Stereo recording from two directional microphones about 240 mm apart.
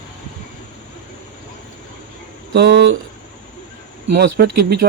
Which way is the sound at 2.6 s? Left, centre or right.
Right.